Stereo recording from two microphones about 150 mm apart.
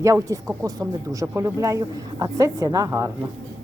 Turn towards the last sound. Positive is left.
turn(degrees=-20)  # may be behind; listen again after turning